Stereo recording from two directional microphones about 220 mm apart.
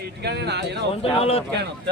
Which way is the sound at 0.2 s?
50° right (ahead or behind).